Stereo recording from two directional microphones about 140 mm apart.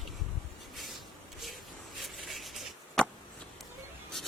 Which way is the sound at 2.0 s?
Centre (ahead or behind).